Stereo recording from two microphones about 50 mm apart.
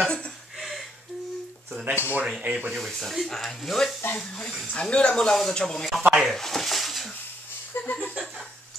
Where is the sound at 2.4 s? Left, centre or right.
Right.